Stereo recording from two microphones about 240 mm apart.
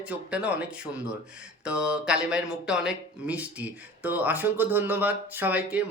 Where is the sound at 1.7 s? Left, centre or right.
Centre.